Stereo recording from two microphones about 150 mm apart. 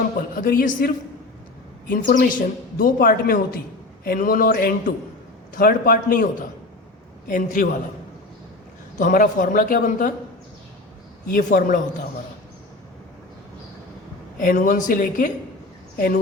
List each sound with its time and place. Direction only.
0.3 s a woman's voice: 65° left (ahead or behind)
9.0 s speech: 60° left (ahead or behind)
11.3 s speech: 65° left (ahead or behind)
14.3 s speech: 60° left (ahead or behind)